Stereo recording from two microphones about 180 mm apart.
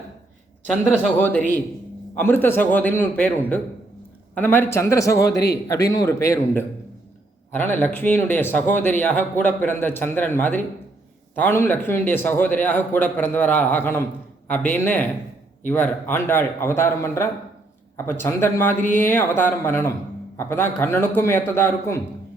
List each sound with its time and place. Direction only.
0.7 s a man's voice: 5° left (ahead or behind)